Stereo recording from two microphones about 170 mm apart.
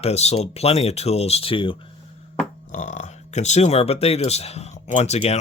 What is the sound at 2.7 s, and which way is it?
Speech, 45° left (ahead or behind).